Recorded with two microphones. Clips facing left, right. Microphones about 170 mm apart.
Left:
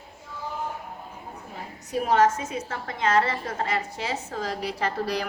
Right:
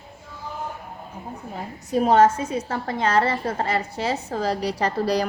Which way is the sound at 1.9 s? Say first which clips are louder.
Right 5 dB; 30° right (ahead or behind).